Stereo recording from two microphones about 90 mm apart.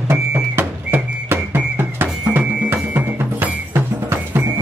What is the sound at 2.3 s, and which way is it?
Music, 20° right (ahead or behind).